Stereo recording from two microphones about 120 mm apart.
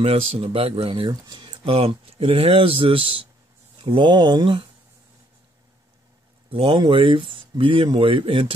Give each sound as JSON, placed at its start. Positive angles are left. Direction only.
{"t": 0.0, "sound": "speech", "side_deg": -55}
{"t": 6.5, "sound": "speech", "side_deg": -50}